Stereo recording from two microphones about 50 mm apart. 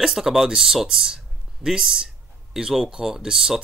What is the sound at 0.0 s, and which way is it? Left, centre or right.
Speech, centre.